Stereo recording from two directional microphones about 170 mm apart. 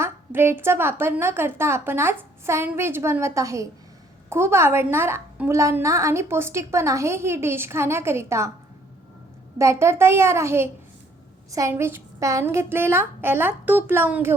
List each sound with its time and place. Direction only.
0.0 s a woman's voice: 15° right (ahead or behind)
9.6 s a woman's voice: 15° right (ahead or behind)